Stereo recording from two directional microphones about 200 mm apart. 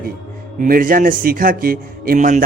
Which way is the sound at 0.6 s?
45° right (ahead or behind).